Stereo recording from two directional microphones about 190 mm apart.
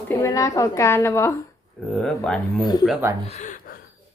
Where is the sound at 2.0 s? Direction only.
5° left (ahead or behind).